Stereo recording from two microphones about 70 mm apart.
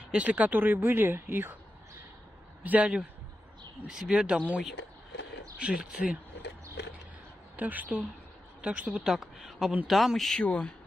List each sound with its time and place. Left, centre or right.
0.1 s speech: centre
2.6 s a man's voice: right
3.9 s speech: centre
7.5 s a woman's voice: right
8.8 s speech: centre
10.4 s speech: centre